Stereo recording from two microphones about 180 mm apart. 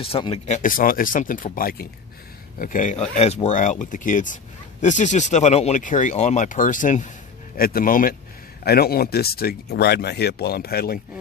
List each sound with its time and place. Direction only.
0.0 s speech: 30° left (ahead or behind)
7.5 s speech: 55° left (ahead or behind)